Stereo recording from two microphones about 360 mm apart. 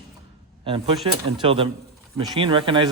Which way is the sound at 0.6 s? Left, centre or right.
Centre.